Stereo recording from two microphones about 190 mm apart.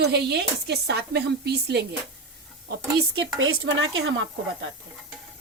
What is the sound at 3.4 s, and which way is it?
Speech, 90° right.